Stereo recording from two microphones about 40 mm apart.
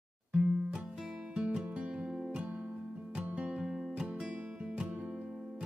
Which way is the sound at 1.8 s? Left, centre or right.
Right.